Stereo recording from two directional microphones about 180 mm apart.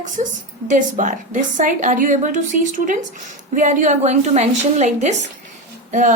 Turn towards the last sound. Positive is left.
turn(degrees=-45)  # may be behind; listen again after turning